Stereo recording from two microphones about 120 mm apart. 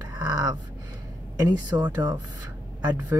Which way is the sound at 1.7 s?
35° right (ahead or behind).